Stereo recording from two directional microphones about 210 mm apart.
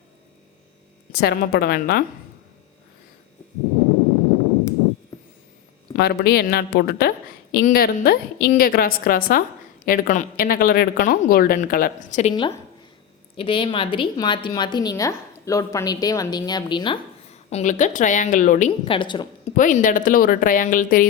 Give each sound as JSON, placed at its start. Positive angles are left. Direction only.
{"t": 1.1, "sound": "a woman's voice", "side_deg": 50}
{"t": 6.0, "sound": "a woman's voice", "side_deg": 50}
{"t": 12.3, "sound": "a woman's voice", "side_deg": 20}
{"t": 17.5, "sound": "speech", "side_deg": 35}
{"t": 18.7, "sound": "a woman's voice", "side_deg": 25}
{"t": 19.5, "sound": "speech", "side_deg": 40}